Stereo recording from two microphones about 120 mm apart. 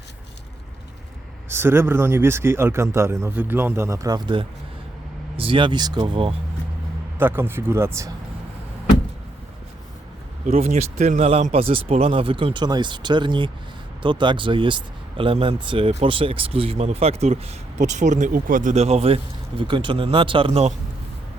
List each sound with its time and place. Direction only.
1.5 s speech: 20° right (ahead or behind); by 6.3 s 45° right (ahead or behind)
7.2 s speech: 20° right (ahead or behind)
10.5 s speech: 65° right (ahead or behind)
17.7 s speech: 80° right; by 20.7 s 55° right (ahead or behind)